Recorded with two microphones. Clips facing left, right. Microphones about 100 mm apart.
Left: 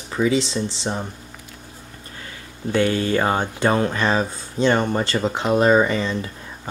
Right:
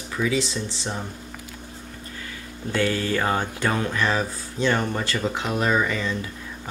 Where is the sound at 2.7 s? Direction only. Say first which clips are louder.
Left 4 dB; 20° left (ahead or behind).